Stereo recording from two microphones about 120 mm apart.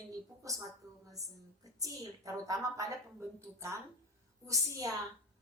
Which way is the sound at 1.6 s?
30° right (ahead or behind).